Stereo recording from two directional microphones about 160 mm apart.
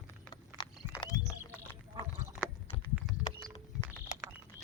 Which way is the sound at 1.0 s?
20° left (ahead or behind).